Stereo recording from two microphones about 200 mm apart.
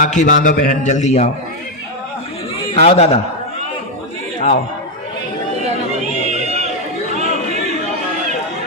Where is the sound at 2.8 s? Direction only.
30° left (ahead or behind).